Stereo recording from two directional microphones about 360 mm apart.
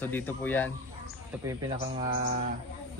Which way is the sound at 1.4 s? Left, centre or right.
Centre.